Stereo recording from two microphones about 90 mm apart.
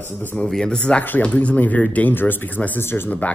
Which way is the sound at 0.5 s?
10° left (ahead or behind).